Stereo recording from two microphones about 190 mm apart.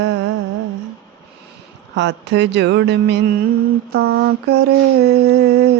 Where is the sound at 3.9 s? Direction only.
75° right (ahead or behind).